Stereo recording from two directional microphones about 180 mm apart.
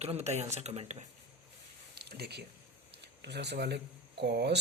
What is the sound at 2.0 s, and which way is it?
A woman's voice, 65° right (ahead or behind).